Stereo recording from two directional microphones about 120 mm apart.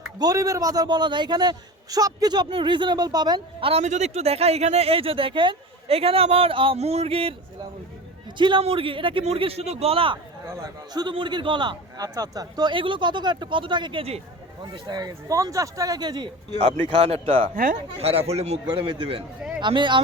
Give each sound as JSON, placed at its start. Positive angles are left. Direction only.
{"t": 0.2, "sound": "a man's voice", "side_deg": -30}
{"t": 3.7, "sound": "speech", "side_deg": -70}
{"t": 6.7, "sound": "speech", "side_deg": -60}
{"t": 8.4, "sound": "a man's voice", "side_deg": -40}
{"t": 10.4, "sound": "speech", "side_deg": -25}
{"t": 10.9, "sound": "a man's voice", "side_deg": -40}
{"t": 17.0, "sound": "a man's voice", "side_deg": -55}
{"t": 18.7, "sound": "a man's voice", "side_deg": -45}